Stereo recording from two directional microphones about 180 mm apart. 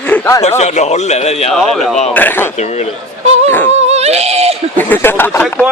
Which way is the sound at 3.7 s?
35° right (ahead or behind).